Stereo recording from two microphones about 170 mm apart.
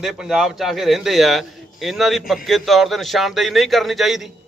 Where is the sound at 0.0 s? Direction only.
Centre (ahead or behind).